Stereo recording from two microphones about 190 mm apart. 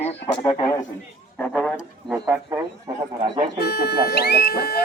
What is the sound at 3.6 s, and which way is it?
Speech, 55° left (ahead or behind).